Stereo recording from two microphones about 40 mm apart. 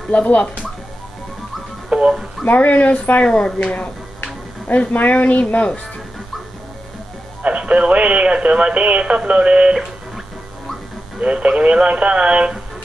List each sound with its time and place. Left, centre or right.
0.1 s speech: left
1.9 s music: right
2.4 s speech: left
3.7 s music: left
5.2 s speech: left
7.4 s speech: right
11.1 s speech: right